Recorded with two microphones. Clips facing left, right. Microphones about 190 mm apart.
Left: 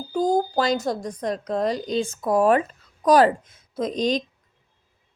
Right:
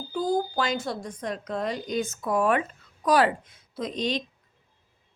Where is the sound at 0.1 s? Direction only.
40° left (ahead or behind).